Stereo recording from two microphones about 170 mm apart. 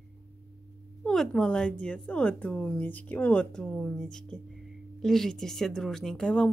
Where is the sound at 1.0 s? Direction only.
5° left (ahead or behind).